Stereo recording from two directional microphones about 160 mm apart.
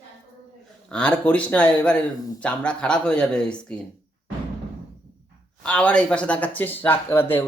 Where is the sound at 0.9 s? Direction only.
5° left (ahead or behind).